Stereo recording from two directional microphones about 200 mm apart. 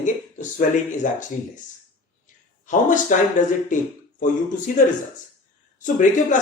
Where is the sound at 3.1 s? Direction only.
40° left (ahead or behind).